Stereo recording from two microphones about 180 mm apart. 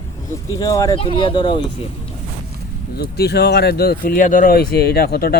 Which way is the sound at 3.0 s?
65° left (ahead or behind).